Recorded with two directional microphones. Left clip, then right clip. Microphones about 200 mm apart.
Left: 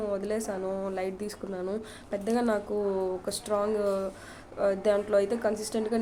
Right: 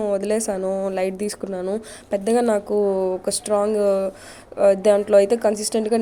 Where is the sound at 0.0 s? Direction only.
35° right (ahead or behind).